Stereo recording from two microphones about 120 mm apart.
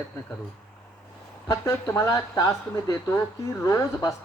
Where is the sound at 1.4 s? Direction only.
25° left (ahead or behind).